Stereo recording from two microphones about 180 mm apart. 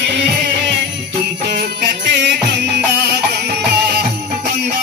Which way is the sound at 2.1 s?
75° right (ahead or behind).